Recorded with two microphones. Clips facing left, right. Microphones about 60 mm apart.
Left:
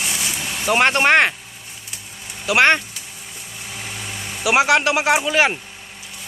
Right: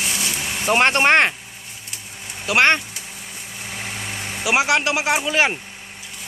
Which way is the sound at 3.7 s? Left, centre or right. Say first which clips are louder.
Right 2 dB; right.